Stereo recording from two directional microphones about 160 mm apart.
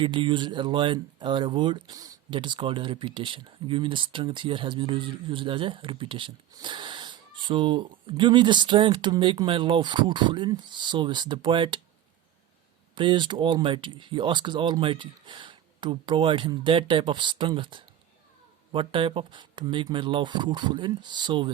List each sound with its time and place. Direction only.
0.0 s speech: 30° right (ahead or behind)
13.0 s speech: 30° right (ahead or behind)